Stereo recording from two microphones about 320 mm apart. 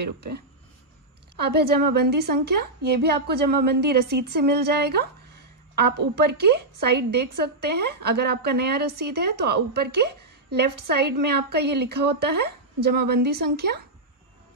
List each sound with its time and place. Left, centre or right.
0.0 s a woman's voice: right